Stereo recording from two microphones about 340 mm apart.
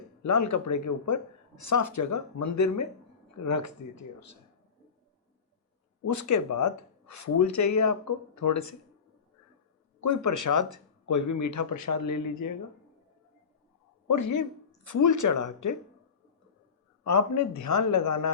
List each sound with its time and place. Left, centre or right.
0.2 s speech: left
6.1 s speech: left
10.0 s speech: left
14.1 s speech: left
17.0 s speech: left